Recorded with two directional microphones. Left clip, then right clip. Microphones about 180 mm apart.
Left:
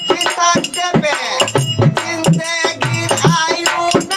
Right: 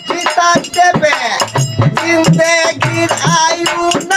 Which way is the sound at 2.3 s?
45° right (ahead or behind).